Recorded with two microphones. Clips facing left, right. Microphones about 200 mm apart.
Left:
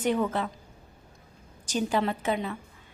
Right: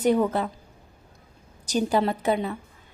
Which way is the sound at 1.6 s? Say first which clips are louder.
Right 4 dB; 40° right (ahead or behind).